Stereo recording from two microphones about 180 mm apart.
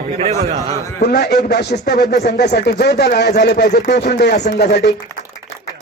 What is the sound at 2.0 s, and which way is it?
Speech, 45° left (ahead or behind).